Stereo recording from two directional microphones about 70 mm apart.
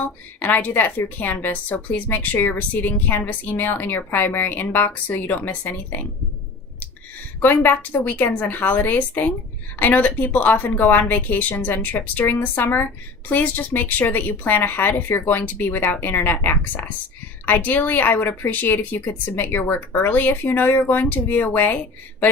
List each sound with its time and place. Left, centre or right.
0.3 s a woman's voice: left
7.4 s a woman's voice: left